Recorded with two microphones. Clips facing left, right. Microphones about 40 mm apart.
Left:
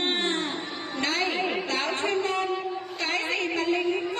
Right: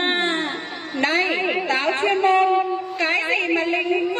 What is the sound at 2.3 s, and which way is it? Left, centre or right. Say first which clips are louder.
Music: right 10 dB; right.